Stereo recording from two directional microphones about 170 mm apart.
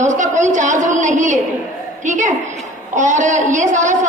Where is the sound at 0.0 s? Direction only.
45° right (ahead or behind).